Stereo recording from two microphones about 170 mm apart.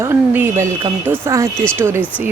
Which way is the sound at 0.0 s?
15° right (ahead or behind).